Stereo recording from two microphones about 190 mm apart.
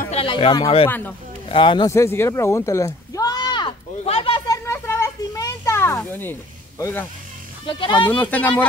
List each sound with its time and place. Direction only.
0.0 s speech: 30° left (ahead or behind)
0.8 s speech: 10° left (ahead or behind)
1.5 s speech: 25° left (ahead or behind)
1.9 s a sound: 15° left (ahead or behind)
4.6 s a sound: 15° left (ahead or behind)
6.8 s speech: 10° left (ahead or behind)
7.6 s speech: 25° left (ahead or behind)
8.0 s speech: 10° left (ahead or behind)